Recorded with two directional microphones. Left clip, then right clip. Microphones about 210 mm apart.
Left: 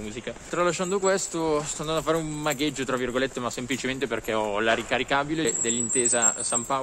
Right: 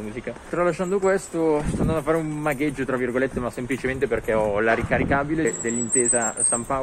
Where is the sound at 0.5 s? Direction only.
10° left (ahead or behind).